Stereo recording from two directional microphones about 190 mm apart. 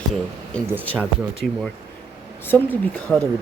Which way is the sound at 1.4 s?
Centre (ahead or behind).